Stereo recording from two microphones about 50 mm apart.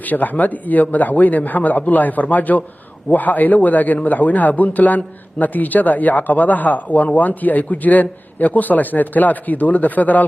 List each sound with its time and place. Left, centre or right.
0.0 s a man's voice: left